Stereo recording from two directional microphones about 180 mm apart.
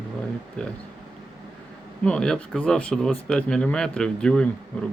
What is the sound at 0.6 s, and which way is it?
Speech, 5° left (ahead or behind).